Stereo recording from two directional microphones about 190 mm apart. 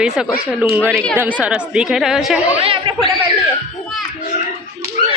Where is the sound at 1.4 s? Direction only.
5° right (ahead or behind).